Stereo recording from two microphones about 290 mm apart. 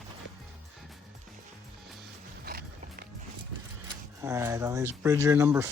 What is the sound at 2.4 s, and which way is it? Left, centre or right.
Music, right.